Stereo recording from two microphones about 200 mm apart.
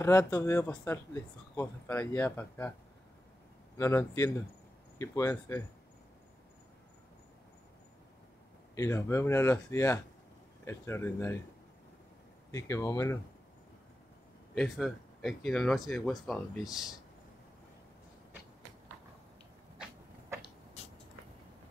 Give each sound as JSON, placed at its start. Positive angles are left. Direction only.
{"t": 0.0, "sound": "speech", "side_deg": 15}
{"t": 3.7, "sound": "speech", "side_deg": 15}
{"t": 8.7, "sound": "speech", "side_deg": 15}
{"t": 12.4, "sound": "speech", "side_deg": 15}
{"t": 14.5, "sound": "speech", "side_deg": 0}